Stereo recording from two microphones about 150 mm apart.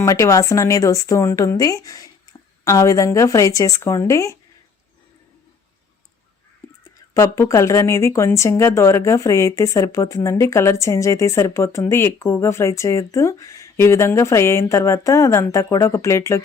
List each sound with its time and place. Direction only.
0.0 s speech: 20° left (ahead or behind)
7.1 s speech: 20° left (ahead or behind)